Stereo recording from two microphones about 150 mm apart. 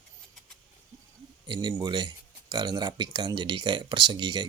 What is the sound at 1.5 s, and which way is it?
Speech, 30° right (ahead or behind).